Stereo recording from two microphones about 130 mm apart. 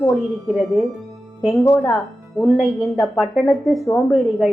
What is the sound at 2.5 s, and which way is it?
Speech, centre (ahead or behind).